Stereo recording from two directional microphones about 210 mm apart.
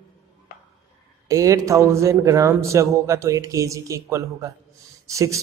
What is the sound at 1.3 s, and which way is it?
Speech, 15° right (ahead or behind).